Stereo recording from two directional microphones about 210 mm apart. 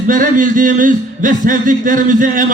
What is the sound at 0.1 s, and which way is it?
Speech, 40° right (ahead or behind).